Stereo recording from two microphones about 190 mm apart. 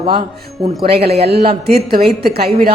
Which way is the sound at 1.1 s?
60° right (ahead or behind).